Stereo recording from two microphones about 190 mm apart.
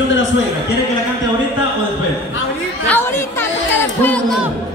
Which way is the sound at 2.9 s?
10° left (ahead or behind).